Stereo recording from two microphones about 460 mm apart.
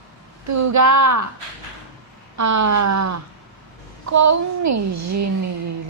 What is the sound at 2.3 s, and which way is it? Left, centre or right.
A woman's voice, right.